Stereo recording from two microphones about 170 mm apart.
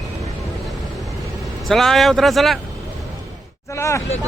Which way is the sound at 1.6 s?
Centre (ahead or behind).